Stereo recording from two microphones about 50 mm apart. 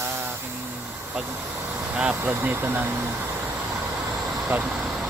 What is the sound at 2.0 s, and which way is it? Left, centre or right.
Speech, centre.